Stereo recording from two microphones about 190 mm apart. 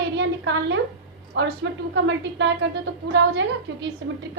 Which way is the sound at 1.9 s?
70° right (ahead or behind).